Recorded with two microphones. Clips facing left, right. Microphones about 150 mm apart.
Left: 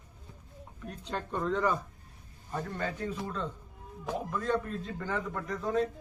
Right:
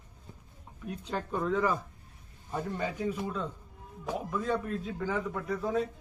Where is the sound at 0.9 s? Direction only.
10° right (ahead or behind).